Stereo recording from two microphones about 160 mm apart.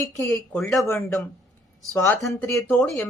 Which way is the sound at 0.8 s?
20° left (ahead or behind).